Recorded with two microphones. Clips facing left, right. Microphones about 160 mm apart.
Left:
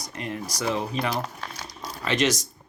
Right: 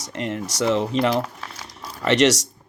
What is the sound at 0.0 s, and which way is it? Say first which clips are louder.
Speech: right 5 dB; 75° right (ahead or behind).